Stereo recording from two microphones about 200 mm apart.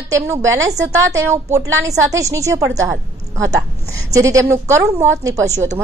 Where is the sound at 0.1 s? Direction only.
15° right (ahead or behind).